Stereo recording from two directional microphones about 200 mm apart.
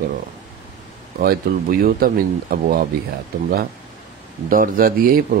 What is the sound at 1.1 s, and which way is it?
Speech, 50° right (ahead or behind).